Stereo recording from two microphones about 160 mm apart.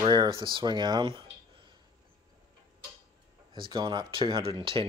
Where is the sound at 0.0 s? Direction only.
30° right (ahead or behind).